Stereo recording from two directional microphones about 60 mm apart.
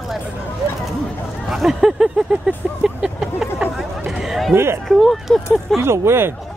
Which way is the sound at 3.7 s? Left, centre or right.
Centre.